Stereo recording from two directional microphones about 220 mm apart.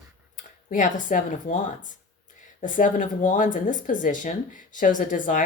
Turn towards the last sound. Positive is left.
turn(degrees=35)  # may be behind; listen again after turning